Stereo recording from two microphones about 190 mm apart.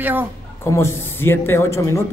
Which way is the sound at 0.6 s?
15° left (ahead or behind).